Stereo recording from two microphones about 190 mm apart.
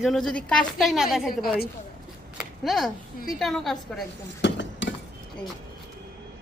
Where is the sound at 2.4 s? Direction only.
Centre (ahead or behind).